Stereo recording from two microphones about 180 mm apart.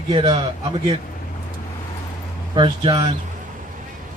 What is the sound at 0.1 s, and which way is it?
Speech, 30° right (ahead or behind).